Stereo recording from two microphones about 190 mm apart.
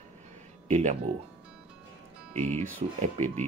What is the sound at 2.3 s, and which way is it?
Speech, 35° right (ahead or behind).